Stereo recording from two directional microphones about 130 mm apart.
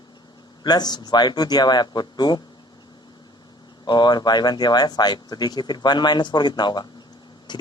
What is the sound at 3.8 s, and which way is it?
Speech, 35° left (ahead or behind).